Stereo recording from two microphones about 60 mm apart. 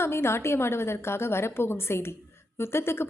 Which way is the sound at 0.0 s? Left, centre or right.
Left.